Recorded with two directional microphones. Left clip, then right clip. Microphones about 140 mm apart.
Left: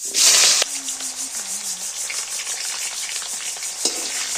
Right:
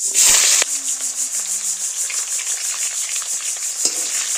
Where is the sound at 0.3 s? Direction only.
15° right (ahead or behind).